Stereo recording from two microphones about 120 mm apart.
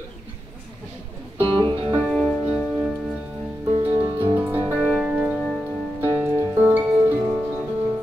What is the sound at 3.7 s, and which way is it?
Music, 20° right (ahead or behind).